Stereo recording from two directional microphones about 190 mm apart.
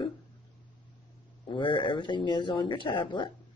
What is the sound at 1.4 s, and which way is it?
Speech, 25° left (ahead or behind).